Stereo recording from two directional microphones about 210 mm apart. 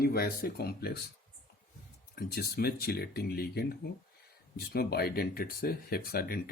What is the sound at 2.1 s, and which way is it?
Speech, 50° left (ahead or behind).